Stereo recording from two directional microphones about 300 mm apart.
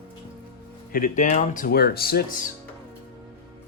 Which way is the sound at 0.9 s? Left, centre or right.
Left.